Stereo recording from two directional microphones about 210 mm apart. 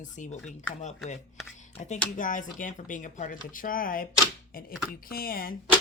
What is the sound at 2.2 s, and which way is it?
Speech, 40° left (ahead or behind).